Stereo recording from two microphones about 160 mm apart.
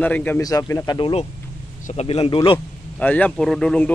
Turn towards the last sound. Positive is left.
turn(degrees=5)  # may be behind; listen again after turning